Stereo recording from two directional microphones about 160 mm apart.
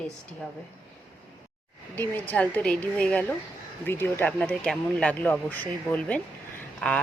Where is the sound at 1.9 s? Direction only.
10° left (ahead or behind).